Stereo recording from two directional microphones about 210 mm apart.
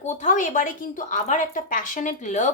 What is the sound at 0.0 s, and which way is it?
A woman's voice, 35° left (ahead or behind).